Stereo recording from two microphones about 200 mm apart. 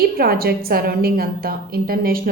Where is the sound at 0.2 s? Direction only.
50° right (ahead or behind).